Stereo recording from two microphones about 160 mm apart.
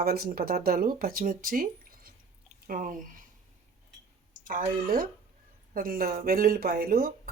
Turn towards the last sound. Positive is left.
turn(degrees=-65)  # may be behind; listen again after turning